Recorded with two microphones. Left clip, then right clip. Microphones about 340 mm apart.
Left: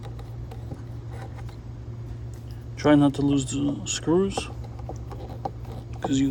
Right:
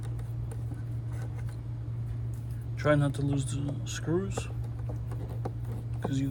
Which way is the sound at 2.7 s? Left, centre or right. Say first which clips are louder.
Left 8 dB; centre.